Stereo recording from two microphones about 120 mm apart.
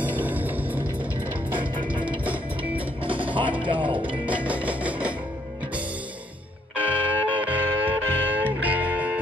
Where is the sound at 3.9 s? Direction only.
45° right (ahead or behind).